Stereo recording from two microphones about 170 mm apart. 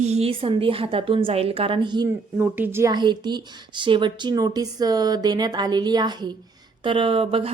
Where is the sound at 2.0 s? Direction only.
10° right (ahead or behind).